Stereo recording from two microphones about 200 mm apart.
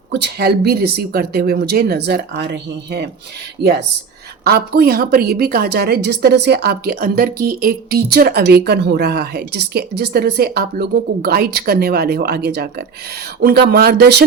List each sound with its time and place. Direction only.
0.1 s a woman's voice: 55° right (ahead or behind)
4.4 s a woman's voice: 50° right (ahead or behind)